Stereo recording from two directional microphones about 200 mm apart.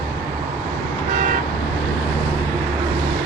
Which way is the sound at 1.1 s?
45° right (ahead or behind).